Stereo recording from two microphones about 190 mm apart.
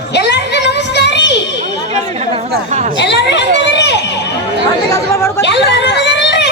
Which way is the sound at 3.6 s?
65° left (ahead or behind).